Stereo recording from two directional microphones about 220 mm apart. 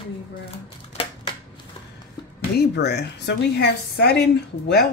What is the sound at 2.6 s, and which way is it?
Speech, 50° left (ahead or behind).